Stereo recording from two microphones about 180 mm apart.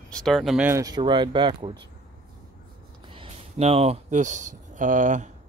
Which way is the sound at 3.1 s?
30° right (ahead or behind).